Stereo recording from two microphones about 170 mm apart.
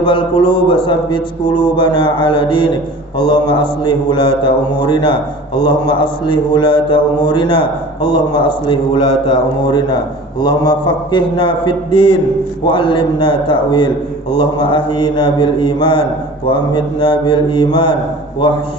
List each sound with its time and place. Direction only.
0.0 s a man's voice: 30° left (ahead or behind)